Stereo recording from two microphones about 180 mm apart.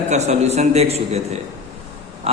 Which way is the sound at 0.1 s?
40° right (ahead or behind).